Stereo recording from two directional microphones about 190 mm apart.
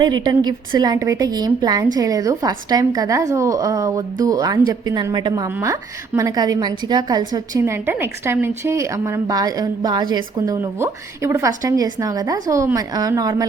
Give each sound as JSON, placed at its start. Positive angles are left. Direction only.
{"t": 0.0, "sound": "a woman's voice", "side_deg": -20}